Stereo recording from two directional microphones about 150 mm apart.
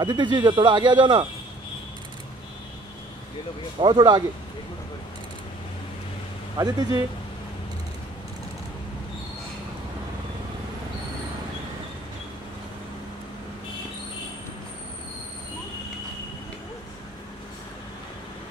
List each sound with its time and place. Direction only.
0.0 s speech: 30° right (ahead or behind)
3.8 s speech: 30° right (ahead or behind)
6.6 s speech: 25° right (ahead or behind)